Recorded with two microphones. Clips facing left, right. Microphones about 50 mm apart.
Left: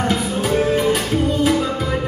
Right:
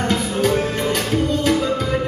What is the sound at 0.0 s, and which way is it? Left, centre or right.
Music, centre.